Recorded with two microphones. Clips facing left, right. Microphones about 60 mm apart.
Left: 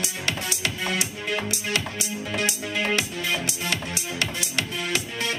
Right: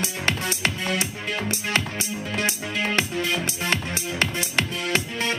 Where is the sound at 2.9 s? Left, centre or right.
Right.